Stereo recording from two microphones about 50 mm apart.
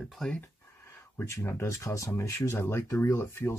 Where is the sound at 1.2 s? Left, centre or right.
Left.